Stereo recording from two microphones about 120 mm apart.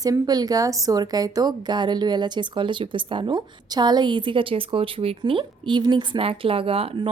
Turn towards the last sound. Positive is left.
turn(degrees=-50)  # may be behind; listen again after turning